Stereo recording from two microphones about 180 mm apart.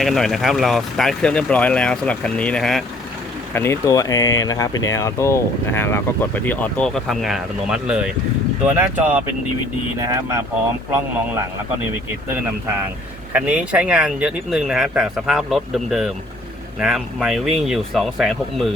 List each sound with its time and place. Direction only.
0.0 s speech: centre (ahead or behind)
3.5 s speech: 15° left (ahead or behind); by 10.4 s 15° right (ahead or behind)
13.3 s speech: 5° right (ahead or behind)